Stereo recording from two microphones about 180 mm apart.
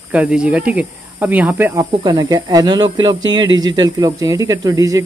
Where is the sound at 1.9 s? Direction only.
20° right (ahead or behind).